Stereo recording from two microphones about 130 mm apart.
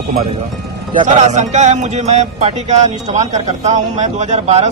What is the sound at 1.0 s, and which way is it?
Speech, 70° right (ahead or behind).